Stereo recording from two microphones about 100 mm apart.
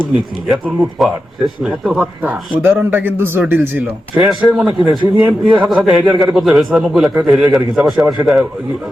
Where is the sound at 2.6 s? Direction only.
20° right (ahead or behind).